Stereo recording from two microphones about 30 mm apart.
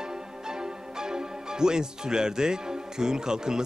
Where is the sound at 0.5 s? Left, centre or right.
Right.